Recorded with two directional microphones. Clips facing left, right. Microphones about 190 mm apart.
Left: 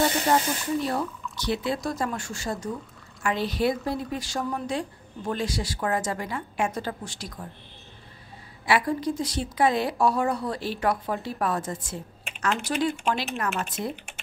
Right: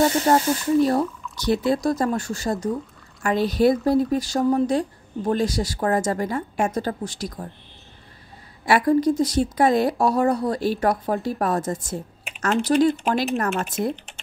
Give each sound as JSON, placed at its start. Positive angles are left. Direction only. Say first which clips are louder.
{"t": 0.3, "sound": "a woman's voice", "louder": "right 5 dB", "side_deg": -40}
{"t": 8.6, "sound": "a woman's voice", "louder": "right 7 dB", "side_deg": -45}